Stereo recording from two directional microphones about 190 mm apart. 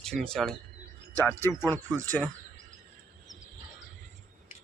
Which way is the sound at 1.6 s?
10° left (ahead or behind).